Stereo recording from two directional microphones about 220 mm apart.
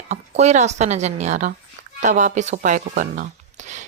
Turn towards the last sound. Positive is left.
turn(degrees=-35)  # may be behind; listen again after turning